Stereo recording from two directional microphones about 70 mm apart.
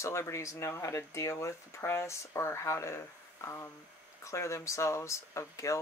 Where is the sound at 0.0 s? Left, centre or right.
Left.